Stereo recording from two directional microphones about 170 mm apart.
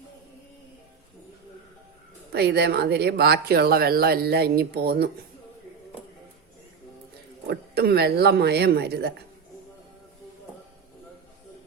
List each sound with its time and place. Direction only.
2.3 s speech: 70° right (ahead or behind)
7.4 s speech: 70° right (ahead or behind)